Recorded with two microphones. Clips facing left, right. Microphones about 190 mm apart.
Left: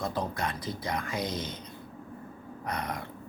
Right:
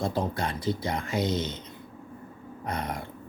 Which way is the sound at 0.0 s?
30° right (ahead or behind).